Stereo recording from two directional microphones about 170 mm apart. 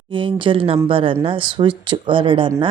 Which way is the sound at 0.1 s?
30° right (ahead or behind).